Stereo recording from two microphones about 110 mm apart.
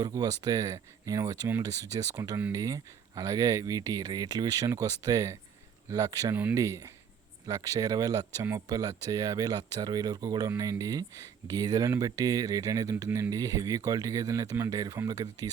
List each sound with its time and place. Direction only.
0.0 s speech: 35° right (ahead or behind)